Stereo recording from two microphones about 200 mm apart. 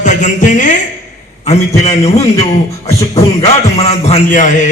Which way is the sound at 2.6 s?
15° left (ahead or behind).